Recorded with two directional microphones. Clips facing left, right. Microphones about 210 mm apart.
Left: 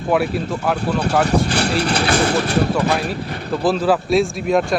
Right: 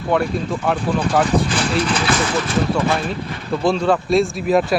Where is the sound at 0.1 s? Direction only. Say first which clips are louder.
Left 1 dB; 5° left (ahead or behind).